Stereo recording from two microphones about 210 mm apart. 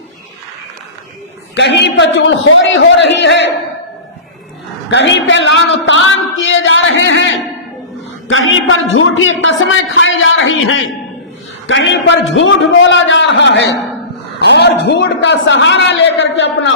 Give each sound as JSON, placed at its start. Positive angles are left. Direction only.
{"t": 1.5, "sound": "a man's voice", "side_deg": 55}
{"t": 4.9, "sound": "a man's voice", "side_deg": 60}